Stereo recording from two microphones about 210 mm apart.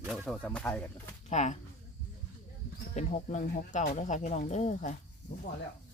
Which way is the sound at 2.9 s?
35° left (ahead or behind).